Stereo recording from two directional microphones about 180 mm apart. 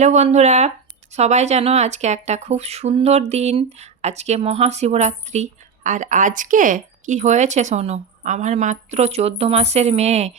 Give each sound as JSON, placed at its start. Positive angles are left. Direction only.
{"t": 0.0, "sound": "speech", "side_deg": -40}